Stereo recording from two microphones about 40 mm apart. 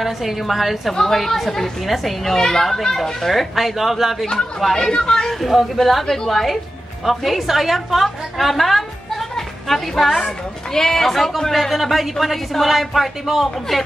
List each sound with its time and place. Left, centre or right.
0.0 s speech: centre
4.9 s speech: centre
5.2 s speech: centre
10.2 s speech: centre